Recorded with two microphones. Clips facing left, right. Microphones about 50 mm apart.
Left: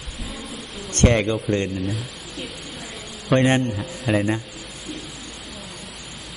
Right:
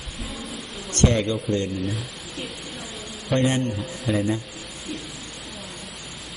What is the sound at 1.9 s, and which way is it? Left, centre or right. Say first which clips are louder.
Speech: left 1 dB; centre.